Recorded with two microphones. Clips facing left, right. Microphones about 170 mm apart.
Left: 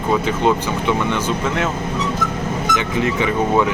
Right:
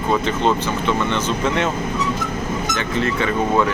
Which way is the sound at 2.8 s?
15° left (ahead or behind).